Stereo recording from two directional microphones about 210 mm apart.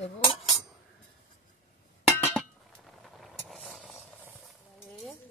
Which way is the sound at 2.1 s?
Centre (ahead or behind).